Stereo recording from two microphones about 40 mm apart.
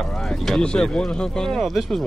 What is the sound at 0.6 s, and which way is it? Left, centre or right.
Speech, left.